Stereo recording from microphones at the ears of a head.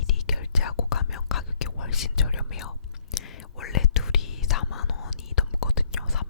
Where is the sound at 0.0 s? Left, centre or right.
Left.